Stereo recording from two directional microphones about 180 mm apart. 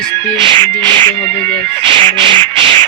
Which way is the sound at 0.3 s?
30° right (ahead or behind).